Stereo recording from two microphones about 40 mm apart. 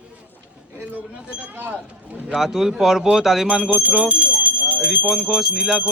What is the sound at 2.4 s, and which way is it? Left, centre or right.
Speech, centre.